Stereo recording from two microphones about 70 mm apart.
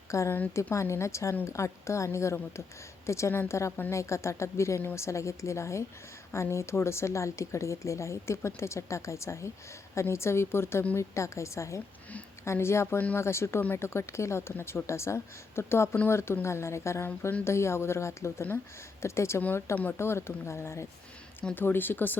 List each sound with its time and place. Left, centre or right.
0.1 s speech: left
3.7 s speech: left
3.9 s a woman's voice: left
19.7 s speech: left
20.0 s a woman's voice: left
21.5 s speech: left